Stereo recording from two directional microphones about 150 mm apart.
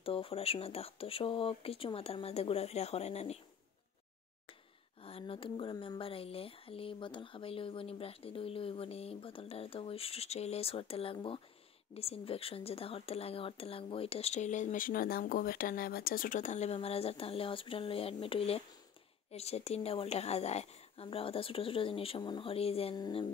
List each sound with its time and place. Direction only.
0.0 s speech: 40° left (ahead or behind)
5.0 s speech: 40° left (ahead or behind)
22.9 s speech: 30° left (ahead or behind)